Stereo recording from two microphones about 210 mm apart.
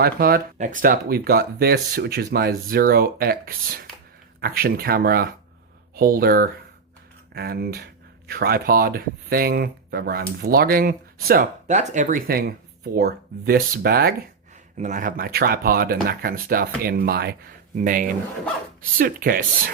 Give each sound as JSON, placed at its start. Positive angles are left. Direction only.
{"t": 0.0, "sound": "speech", "side_deg": -45}